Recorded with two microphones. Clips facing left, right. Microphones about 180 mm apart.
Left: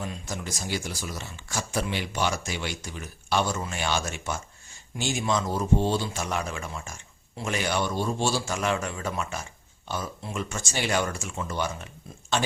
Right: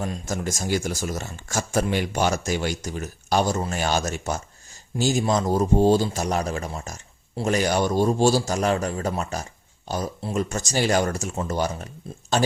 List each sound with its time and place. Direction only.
0.0 s a man's voice: 45° right (ahead or behind)